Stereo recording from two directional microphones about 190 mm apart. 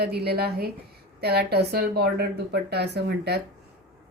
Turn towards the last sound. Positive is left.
turn(degrees=-60)  # may be behind; listen again after turning